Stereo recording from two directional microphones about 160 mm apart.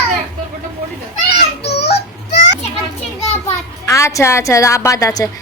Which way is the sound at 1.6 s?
90° left.